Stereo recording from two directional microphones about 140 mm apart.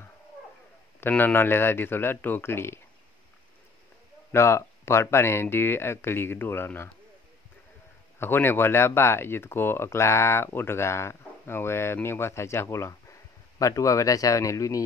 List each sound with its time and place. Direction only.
1.0 s speech: 15° left (ahead or behind)
4.3 s speech: 20° left (ahead or behind)
8.2 s speech: 15° left (ahead or behind)